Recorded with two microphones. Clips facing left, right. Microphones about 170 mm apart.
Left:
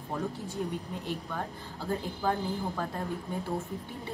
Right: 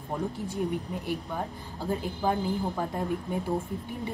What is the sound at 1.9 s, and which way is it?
A woman's voice, 15° right (ahead or behind).